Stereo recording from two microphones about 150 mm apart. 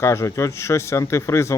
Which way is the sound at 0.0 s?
20° left (ahead or behind).